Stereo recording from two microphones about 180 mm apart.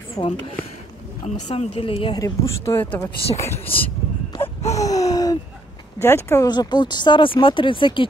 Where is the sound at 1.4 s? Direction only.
35° left (ahead or behind); by 3.9 s 10° left (ahead or behind).